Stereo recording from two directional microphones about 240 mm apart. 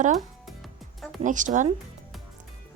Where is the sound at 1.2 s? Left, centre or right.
Right.